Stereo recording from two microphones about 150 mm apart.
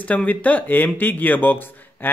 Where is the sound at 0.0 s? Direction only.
10° left (ahead or behind).